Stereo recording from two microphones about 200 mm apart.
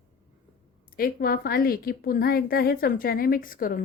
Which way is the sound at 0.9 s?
45° left (ahead or behind).